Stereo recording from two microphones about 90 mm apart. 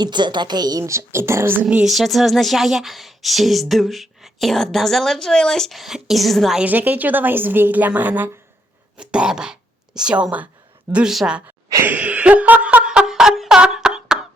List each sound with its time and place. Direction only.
0.0 s a woman's voice: 55° right (ahead or behind); by 1.6 s 25° right (ahead or behind)
1.6 s speech: 5° right (ahead or behind)
6.6 s a woman's voice: 20° right (ahead or behind)
11.8 s a sound: 20° right (ahead or behind)